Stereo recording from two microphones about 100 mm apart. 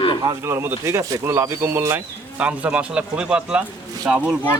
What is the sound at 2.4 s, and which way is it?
Speech, 15° right (ahead or behind).